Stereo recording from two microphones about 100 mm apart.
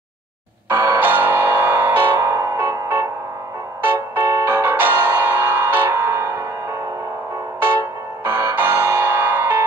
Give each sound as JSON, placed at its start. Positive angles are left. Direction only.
{"t": 0.7, "sound": "music", "side_deg": -25}
{"t": 8.2, "sound": "music", "side_deg": -25}